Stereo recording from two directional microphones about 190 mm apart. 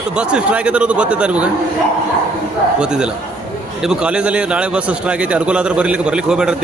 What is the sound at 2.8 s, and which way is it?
A man's voice, 5° right (ahead or behind).